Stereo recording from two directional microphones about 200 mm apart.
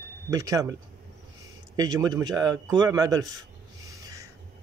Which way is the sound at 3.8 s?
15° right (ahead or behind).